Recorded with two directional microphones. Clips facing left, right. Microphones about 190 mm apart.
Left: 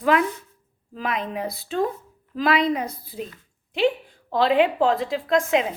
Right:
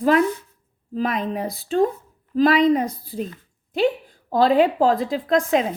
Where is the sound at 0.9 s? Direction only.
40° right (ahead or behind).